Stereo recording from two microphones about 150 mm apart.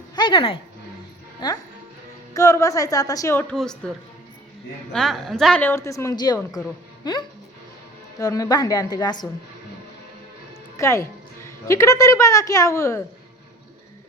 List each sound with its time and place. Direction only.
0.2 s a woman's voice: 30° left (ahead or behind)
2.3 s a woman's voice: 20° left (ahead or behind)
3.5 s a woman's voice: 5° left (ahead or behind)
5.7 s a woman's voice: 20° left (ahead or behind)
10.8 s a woman's voice: 20° left (ahead or behind)